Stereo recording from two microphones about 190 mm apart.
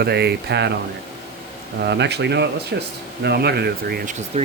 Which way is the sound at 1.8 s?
65° right (ahead or behind).